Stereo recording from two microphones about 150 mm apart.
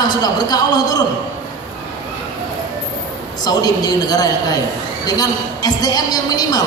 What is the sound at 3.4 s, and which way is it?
A woman's voice, 25° left (ahead or behind).